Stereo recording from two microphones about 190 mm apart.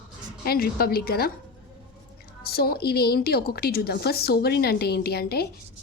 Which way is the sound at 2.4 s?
55° left (ahead or behind).